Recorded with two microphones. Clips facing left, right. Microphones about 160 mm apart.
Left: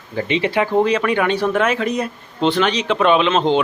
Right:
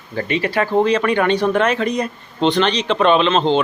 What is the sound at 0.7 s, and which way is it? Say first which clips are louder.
Speech: right 2 dB; 5° left (ahead or behind).